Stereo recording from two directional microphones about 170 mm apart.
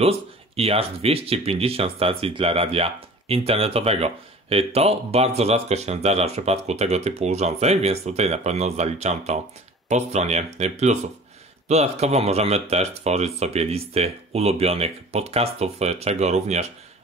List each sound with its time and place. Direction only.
0.6 s speech: 35° right (ahead or behind)